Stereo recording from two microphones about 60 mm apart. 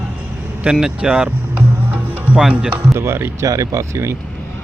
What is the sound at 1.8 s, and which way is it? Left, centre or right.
Music, right.